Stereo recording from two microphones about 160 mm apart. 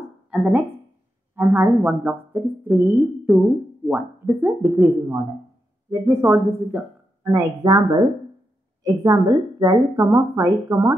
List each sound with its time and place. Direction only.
0.3 s speech: 10° right (ahead or behind)